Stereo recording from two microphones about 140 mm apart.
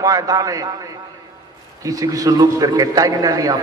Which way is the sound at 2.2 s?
25° right (ahead or behind).